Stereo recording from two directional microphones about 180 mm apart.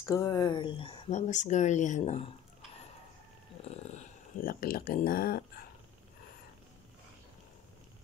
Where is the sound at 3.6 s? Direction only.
35° left (ahead or behind).